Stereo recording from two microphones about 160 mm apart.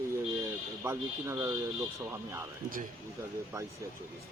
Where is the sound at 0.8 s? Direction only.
15° right (ahead or behind).